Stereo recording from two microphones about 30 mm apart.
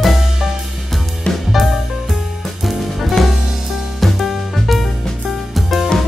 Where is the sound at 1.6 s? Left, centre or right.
Centre.